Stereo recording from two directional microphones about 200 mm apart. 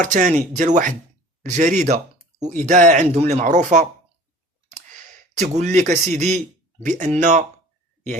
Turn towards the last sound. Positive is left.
turn(degrees=-35)  # may be behind; listen again after turning